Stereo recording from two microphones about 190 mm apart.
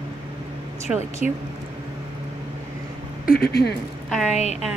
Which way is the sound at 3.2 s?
55° left (ahead or behind).